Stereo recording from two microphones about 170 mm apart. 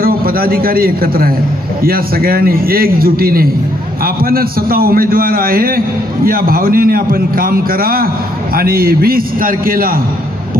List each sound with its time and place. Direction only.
0.0 s a man's voice: 60° right (ahead or behind)